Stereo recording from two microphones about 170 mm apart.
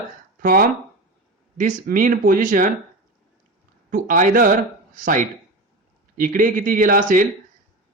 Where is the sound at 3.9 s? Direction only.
50° right (ahead or behind).